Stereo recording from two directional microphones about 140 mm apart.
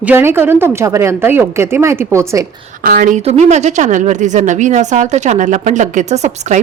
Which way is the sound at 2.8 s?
75° right (ahead or behind).